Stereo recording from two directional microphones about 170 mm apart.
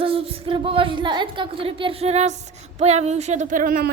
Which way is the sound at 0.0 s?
35° right (ahead or behind).